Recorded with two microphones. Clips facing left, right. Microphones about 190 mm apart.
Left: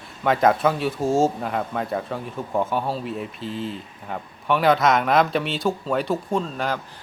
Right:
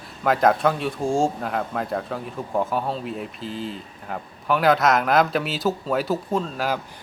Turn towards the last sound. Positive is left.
turn(degrees=-5)  # may be behind; listen again after turning